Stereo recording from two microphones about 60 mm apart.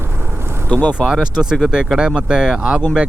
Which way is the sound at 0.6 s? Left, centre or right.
Left.